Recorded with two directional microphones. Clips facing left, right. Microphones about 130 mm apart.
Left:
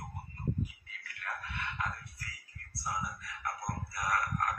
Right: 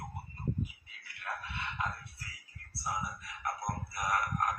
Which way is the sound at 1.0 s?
20° right (ahead or behind).